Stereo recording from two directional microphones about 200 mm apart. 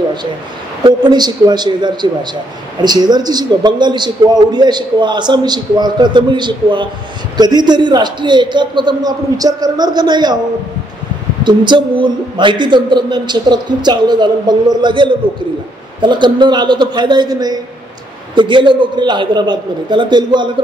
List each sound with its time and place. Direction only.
0.8 s a man's voice: 20° right (ahead or behind)
11.4 s a man's voice: 25° right (ahead or behind)